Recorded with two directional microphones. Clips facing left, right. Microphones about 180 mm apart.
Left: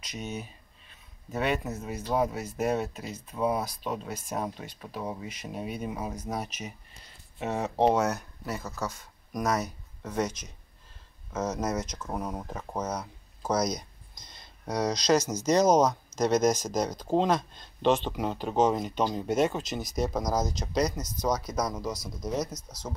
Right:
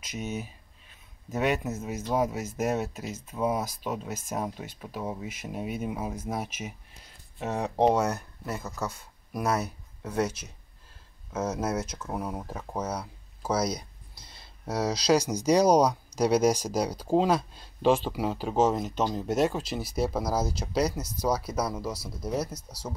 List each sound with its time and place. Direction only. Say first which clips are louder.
0.0 s speech: right 2 dB; 5° right (ahead or behind)
8.6 s speech: right 1 dB; 10° right (ahead or behind)
22.5 s speech: even; 30° right (ahead or behind)